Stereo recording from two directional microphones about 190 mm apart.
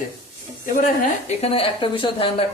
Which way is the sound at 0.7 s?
40° left (ahead or behind).